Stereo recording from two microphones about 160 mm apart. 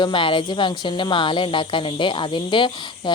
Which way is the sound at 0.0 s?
30° left (ahead or behind).